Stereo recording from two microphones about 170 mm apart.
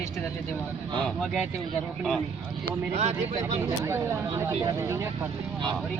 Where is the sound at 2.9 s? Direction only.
40° right (ahead or behind).